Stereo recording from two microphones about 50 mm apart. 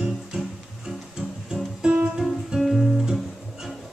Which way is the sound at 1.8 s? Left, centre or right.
Centre.